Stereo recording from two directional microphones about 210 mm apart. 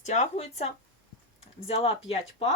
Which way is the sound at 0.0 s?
35° left (ahead or behind).